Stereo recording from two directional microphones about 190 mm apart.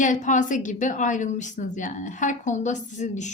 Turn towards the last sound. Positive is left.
turn(degrees=40)  # may be behind; listen again after turning